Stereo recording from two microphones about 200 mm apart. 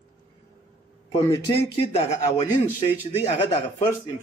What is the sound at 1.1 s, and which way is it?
Speech, 20° left (ahead or behind).